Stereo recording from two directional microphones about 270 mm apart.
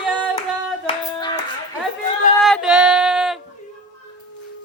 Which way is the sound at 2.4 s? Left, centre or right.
Centre.